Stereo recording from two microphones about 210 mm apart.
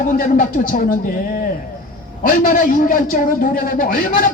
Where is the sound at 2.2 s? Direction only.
40° left (ahead or behind).